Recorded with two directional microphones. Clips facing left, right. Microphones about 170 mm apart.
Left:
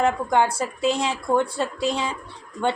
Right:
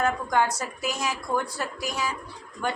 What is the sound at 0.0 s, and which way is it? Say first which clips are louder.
A woman's voice: left 4 dB; 25° left (ahead or behind).